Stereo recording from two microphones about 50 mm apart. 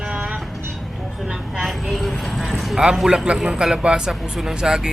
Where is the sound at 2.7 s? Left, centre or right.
Centre.